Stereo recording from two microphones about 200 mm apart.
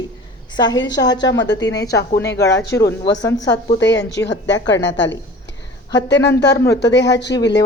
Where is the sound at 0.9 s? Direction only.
20° left (ahead or behind).